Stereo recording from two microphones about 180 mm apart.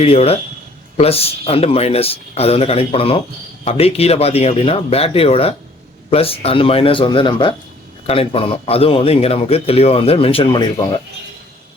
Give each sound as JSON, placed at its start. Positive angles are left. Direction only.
{"t": 0.0, "sound": "a man's voice", "side_deg": 35}